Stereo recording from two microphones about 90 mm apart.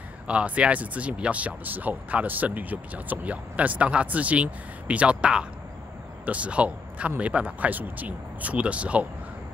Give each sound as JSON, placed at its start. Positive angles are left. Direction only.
{"t": 0.3, "sound": "speech", "side_deg": -15}